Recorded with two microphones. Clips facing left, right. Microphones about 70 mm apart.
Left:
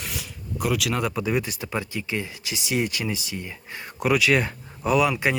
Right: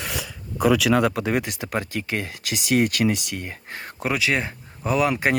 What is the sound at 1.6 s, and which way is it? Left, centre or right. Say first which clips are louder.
Speech: right 2 dB; right.